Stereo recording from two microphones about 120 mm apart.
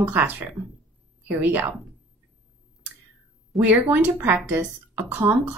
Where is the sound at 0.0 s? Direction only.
15° right (ahead or behind).